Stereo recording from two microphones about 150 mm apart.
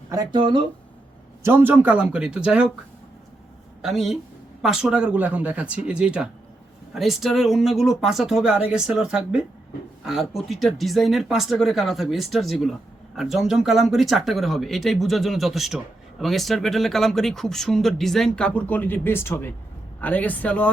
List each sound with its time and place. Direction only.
0.1 s speech: 30° right (ahead or behind)
1.4 s speech: 15° right (ahead or behind)
3.8 s a woman's voice: centre (ahead or behind)